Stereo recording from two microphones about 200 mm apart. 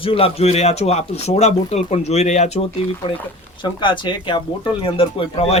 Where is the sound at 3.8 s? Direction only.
25° left (ahead or behind).